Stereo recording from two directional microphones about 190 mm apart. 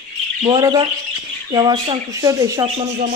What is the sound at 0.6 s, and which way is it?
Speech, 25° right (ahead or behind).